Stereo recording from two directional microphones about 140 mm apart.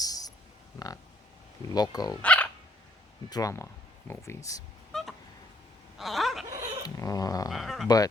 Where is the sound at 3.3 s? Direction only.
25° left (ahead or behind).